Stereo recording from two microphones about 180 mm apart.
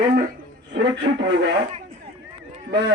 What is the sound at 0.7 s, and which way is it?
Speech, 75° right (ahead or behind).